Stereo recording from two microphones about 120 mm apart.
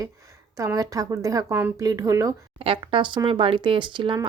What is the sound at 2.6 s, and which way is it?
Speech, 50° right (ahead or behind).